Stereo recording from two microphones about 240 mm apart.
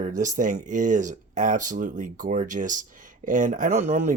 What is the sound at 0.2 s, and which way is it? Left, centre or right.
Speech, right.